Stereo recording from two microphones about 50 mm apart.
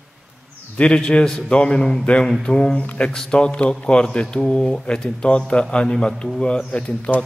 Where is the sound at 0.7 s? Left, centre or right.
Centre.